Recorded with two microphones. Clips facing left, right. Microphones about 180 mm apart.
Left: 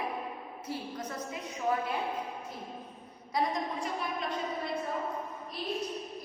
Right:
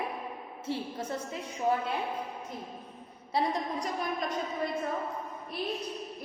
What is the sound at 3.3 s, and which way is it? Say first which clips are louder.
Speech: right 1 dB; 35° right (ahead or behind).